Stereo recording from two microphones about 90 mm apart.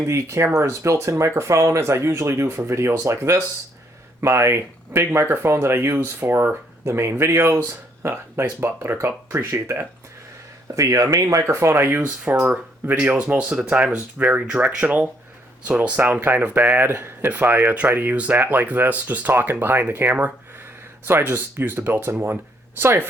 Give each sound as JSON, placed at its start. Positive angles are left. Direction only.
{"t": 0.1, "sound": "speech", "side_deg": -30}